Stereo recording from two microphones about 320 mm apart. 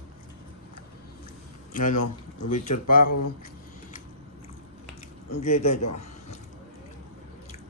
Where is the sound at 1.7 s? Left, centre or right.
Left.